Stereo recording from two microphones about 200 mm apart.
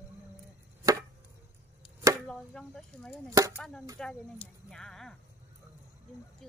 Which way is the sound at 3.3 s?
15° right (ahead or behind).